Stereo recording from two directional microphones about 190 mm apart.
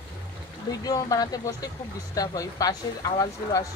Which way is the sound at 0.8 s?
20° left (ahead or behind).